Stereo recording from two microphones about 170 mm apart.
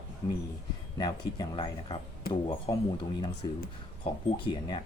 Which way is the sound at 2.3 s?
60° left (ahead or behind).